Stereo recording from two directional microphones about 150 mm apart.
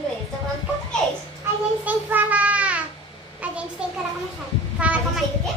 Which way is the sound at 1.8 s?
10° right (ahead or behind).